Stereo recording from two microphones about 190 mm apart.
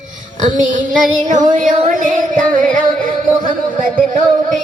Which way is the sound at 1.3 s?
40° right (ahead or behind).